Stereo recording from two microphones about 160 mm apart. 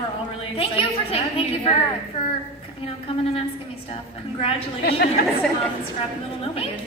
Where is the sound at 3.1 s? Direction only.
35° left (ahead or behind).